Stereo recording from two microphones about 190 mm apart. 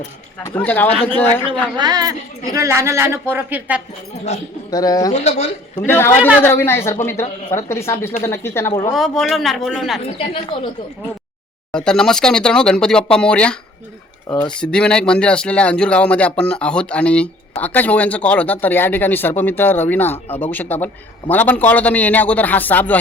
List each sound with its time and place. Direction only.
0.4 s speech: 10° left (ahead or behind)
1.8 s a woman's voice: 20° right (ahead or behind)
4.7 s speech: 20° left (ahead or behind)
5.1 s speech: 35° left (ahead or behind)
5.8 s speech: 10° left (ahead or behind)
8.9 s speech: centre (ahead or behind)
10.2 s speech: 30° left (ahead or behind)
11.7 s speech: 5° left (ahead or behind)